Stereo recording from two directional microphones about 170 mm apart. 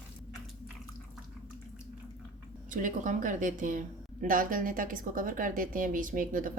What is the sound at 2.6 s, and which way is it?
Speech, 50° right (ahead or behind).